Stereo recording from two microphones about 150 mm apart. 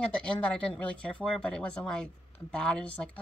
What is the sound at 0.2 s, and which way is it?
A woman's voice, 5° left (ahead or behind).